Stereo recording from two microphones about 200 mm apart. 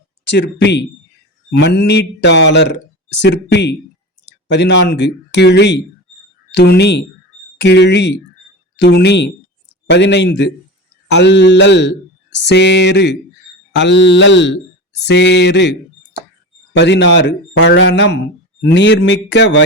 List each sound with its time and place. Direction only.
0.3 s a man's voice: 60° left (ahead or behind)
16.7 s a man's voice: 60° left (ahead or behind)